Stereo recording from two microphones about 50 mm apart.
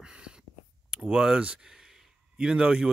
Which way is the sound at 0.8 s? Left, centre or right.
Centre.